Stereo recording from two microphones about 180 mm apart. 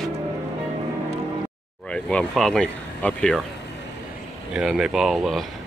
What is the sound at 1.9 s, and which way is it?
Speech, 5° left (ahead or behind).